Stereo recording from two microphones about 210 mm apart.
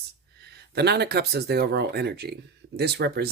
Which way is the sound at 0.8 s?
50° right (ahead or behind).